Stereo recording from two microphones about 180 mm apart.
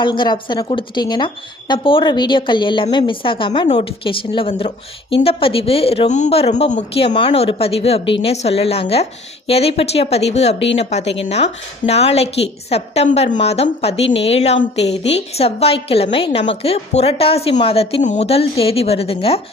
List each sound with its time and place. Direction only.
0.0 s a woman's voice: 25° left (ahead or behind)